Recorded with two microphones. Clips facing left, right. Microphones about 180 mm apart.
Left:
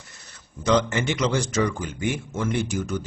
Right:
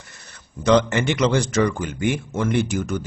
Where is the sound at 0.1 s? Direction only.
60° right (ahead or behind).